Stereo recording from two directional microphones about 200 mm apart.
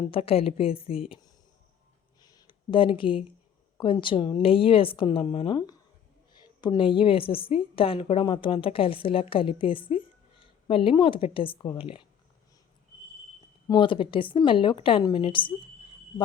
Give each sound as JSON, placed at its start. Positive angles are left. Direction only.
{"t": 0.0, "sound": "a woman's voice", "side_deg": 30}
{"t": 2.3, "sound": "a sound", "side_deg": 25}
{"t": 3.8, "sound": "a woman's voice", "side_deg": 25}
{"t": 13.7, "sound": "a woman's voice", "side_deg": 25}